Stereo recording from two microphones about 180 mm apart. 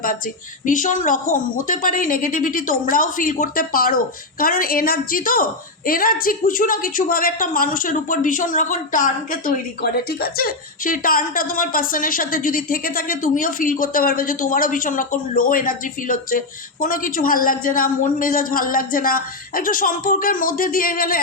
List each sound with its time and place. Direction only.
0.6 s a woman's voice: 45° left (ahead or behind)